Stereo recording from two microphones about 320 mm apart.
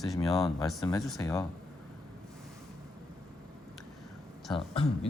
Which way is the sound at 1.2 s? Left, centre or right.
Centre.